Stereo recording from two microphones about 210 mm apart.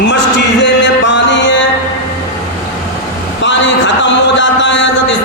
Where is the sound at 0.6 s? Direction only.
60° left (ahead or behind).